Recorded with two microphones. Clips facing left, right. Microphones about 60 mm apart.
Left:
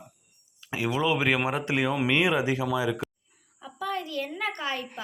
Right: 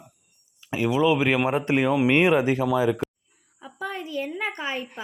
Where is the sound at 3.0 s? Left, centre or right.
Centre.